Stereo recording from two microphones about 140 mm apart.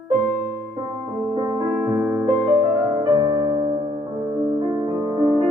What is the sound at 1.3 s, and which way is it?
Music, 30° right (ahead or behind).